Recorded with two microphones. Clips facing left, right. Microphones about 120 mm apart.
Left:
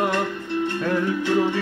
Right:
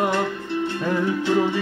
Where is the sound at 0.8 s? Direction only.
10° right (ahead or behind).